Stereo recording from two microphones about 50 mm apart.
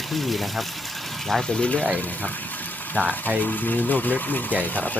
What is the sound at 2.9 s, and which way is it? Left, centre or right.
Speech, centre.